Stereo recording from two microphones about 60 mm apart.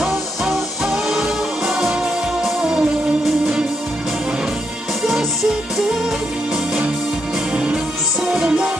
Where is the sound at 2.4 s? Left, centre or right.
Centre.